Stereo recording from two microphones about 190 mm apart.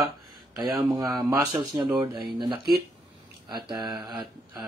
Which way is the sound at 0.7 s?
20° right (ahead or behind).